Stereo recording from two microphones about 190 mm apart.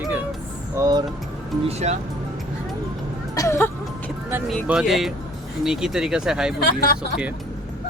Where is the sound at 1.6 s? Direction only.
35° right (ahead or behind).